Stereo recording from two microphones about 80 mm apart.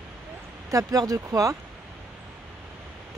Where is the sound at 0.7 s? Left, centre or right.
Right.